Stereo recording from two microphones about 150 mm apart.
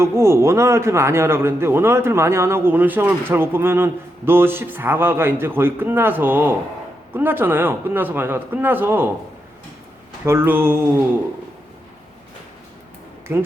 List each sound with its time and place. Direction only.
0.0 s a man's voice: 15° right (ahead or behind)
10.2 s a man's voice: 15° right (ahead or behind)